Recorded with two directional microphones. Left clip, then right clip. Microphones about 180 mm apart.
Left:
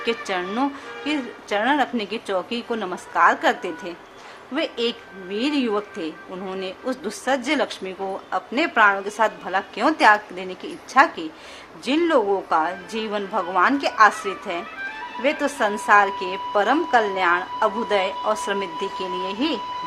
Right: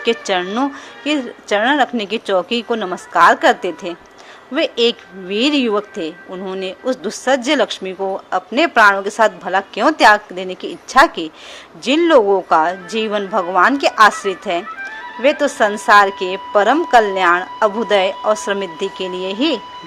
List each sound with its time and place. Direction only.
0.0 s a woman's voice: 35° right (ahead or behind)